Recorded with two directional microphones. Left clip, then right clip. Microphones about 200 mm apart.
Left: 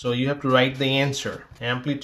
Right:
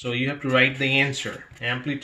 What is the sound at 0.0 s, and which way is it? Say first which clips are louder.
Speech: left 2 dB; 40° left (ahead or behind).